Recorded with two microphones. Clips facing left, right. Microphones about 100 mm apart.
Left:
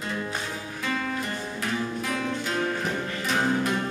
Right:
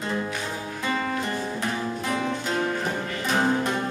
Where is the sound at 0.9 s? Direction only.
25° right (ahead or behind).